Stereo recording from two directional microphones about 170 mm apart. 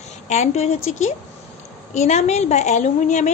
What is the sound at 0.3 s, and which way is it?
Speech, 40° left (ahead or behind).